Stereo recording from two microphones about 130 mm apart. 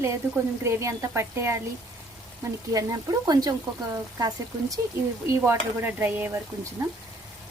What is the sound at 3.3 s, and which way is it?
Speech, 30° right (ahead or behind).